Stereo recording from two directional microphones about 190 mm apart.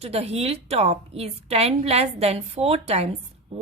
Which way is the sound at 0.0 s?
35° right (ahead or behind).